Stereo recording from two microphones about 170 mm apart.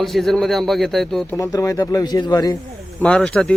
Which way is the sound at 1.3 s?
20° left (ahead or behind).